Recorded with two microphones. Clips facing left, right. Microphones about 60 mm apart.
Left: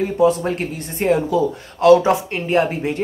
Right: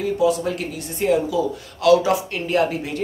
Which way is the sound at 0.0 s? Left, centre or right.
Left.